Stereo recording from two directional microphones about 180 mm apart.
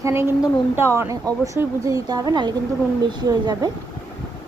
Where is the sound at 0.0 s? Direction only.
15° right (ahead or behind).